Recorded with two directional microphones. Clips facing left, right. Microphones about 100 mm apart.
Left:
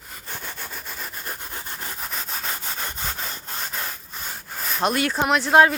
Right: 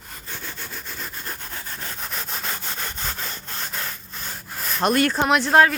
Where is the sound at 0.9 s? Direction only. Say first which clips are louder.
Right 1 dB; 10° left (ahead or behind).